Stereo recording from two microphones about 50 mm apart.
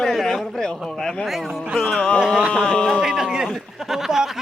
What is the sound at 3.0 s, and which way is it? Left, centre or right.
Speech, centre.